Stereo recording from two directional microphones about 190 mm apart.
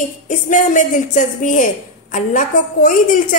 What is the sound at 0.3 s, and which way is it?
A woman's voice, 40° left (ahead or behind).